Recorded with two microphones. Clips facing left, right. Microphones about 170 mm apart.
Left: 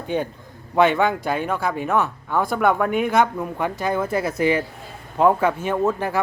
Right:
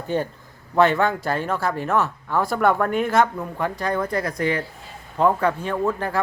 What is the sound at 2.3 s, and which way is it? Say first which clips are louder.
Speech: left 1 dB; centre (ahead or behind).